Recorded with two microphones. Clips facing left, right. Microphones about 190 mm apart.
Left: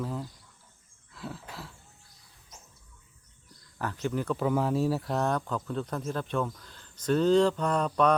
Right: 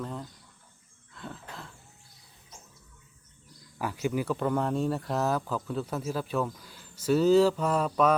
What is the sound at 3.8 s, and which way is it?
Speech, 10° right (ahead or behind).